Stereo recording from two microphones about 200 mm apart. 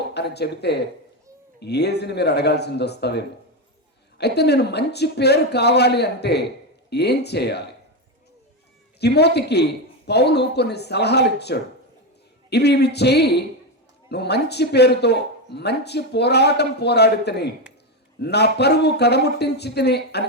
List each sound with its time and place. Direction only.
0.1 s speech: 55° left (ahead or behind)
9.0 s speech: 55° left (ahead or behind)